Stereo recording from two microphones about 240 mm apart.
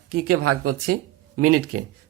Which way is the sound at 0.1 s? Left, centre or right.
Right.